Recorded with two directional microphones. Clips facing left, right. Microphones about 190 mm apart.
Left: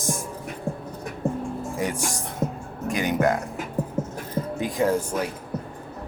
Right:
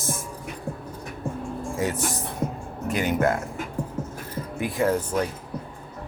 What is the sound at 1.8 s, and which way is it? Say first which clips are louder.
Speech: right 2 dB; 15° left (ahead or behind).